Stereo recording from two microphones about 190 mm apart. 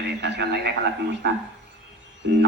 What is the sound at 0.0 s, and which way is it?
A man's voice, 60° right (ahead or behind).